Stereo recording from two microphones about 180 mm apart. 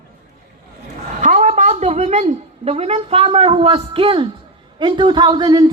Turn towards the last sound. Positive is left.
turn(degrees=-25)  # may be behind; listen again after turning